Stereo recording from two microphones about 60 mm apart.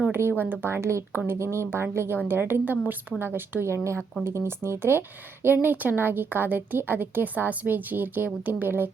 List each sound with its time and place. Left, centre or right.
0.1 s a woman's voice: right
3.7 s speech: right
5.6 s a woman's voice: right